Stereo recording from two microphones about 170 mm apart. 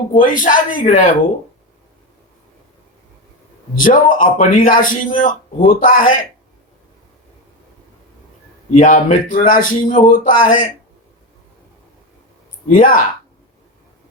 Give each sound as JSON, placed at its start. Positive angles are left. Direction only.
{"t": 0.1, "sound": "a man's voice", "side_deg": 50}
{"t": 3.8, "sound": "a man's voice", "side_deg": 50}
{"t": 8.7, "sound": "a man's voice", "side_deg": 45}
{"t": 12.6, "sound": "a man's voice", "side_deg": 55}